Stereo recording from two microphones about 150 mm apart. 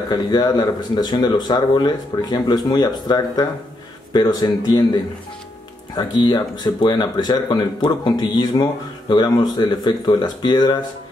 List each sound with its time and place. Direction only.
0.1 s speech: 30° left (ahead or behind)